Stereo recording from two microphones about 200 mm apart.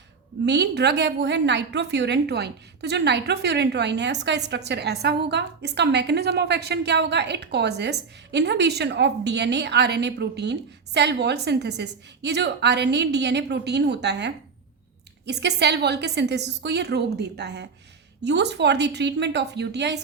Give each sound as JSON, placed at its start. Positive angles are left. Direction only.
{"t": 0.4, "sound": "a woman's voice", "side_deg": -55}